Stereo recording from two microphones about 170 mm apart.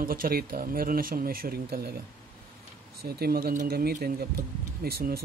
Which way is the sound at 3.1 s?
65° right (ahead or behind).